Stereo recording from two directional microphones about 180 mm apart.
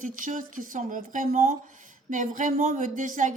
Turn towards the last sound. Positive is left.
turn(degrees=-45)  # may be behind; listen again after turning